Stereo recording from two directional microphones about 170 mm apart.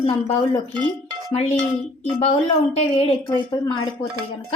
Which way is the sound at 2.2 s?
35° left (ahead or behind).